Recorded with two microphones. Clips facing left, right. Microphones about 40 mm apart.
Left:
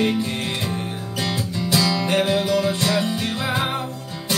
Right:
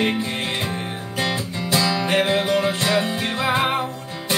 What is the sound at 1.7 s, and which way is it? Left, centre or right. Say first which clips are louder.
Music: right 1 dB; right.